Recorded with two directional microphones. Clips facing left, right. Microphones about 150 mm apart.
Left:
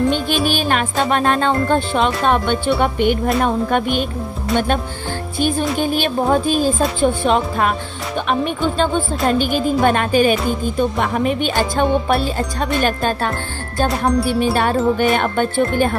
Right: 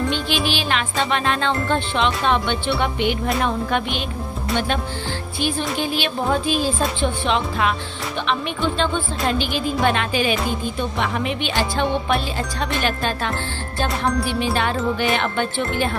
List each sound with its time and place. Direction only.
0.1 s music: 45° left (ahead or behind)
5.4 s music: 45° left (ahead or behind)